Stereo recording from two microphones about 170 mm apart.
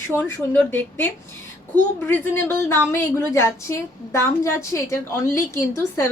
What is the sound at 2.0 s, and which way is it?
A woman's voice, 15° left (ahead or behind).